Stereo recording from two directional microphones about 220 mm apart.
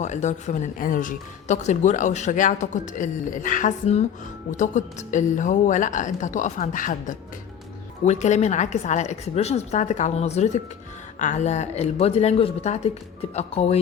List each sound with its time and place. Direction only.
0.0 s speech: 30° left (ahead or behind)